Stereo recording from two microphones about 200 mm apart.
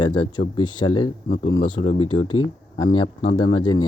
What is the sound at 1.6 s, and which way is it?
Speech, 40° left (ahead or behind).